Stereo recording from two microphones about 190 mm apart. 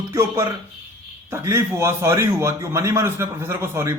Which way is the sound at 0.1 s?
15° right (ahead or behind).